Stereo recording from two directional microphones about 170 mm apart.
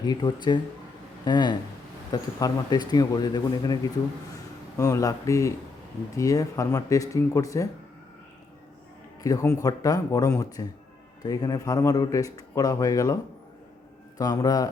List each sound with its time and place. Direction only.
0.0 s speech: 25° left (ahead or behind)
4.8 s speech: 20° left (ahead or behind)
9.2 s speech: 20° left (ahead or behind)
14.2 s speech: 20° left (ahead or behind)